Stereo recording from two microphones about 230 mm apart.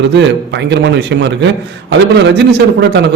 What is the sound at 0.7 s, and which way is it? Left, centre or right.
A man's voice, right.